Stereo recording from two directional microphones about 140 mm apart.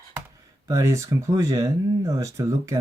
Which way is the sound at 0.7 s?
20° right (ahead or behind).